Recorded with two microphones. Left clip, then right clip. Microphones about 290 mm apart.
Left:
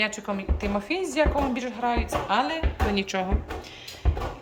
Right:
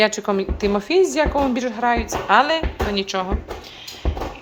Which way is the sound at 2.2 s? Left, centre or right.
Right.